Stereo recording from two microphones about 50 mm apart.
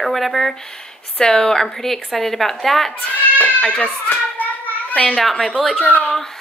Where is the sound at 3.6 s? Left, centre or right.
Centre.